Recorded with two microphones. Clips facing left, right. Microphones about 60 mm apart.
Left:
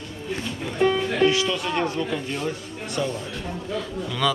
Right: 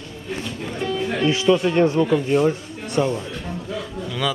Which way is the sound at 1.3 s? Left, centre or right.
Right.